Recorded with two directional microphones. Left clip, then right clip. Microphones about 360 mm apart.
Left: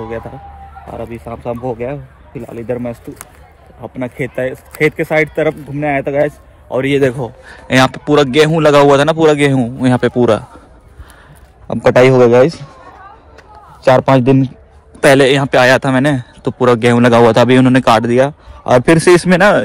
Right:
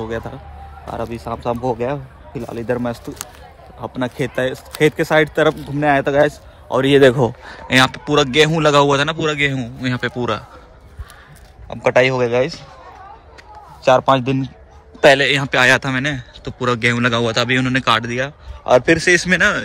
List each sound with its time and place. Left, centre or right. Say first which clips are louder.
0.9 s speech: right 1 dB; centre
7.0 s speech: right 7 dB; right
7.4 s a man's voice: left 5 dB; centre
11.6 s a man's voice: left 6 dB; left
13.8 s a man's voice: left 4 dB; left
15.1 s a man's voice: left 6 dB; centre